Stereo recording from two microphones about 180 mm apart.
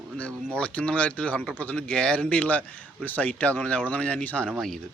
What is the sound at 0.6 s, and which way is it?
Speech, 5° left (ahead or behind).